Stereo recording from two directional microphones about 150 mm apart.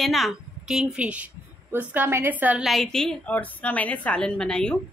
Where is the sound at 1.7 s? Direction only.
10° right (ahead or behind).